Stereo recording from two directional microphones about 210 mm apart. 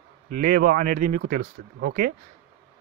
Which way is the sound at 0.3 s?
45° right (ahead or behind).